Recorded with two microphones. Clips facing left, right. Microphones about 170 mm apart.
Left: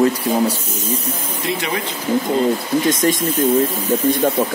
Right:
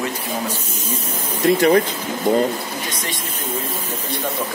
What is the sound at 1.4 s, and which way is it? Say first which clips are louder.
Speech: right 9 dB; 45° right (ahead or behind).